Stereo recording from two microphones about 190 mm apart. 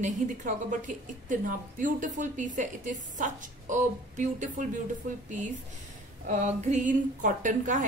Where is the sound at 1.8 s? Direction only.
40° right (ahead or behind).